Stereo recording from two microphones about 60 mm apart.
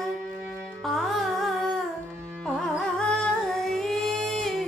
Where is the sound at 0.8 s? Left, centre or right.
Centre.